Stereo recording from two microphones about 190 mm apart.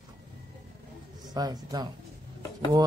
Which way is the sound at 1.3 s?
20° right (ahead or behind).